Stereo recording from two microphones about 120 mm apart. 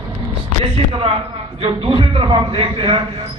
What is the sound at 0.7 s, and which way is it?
A man's voice, 55° right (ahead or behind).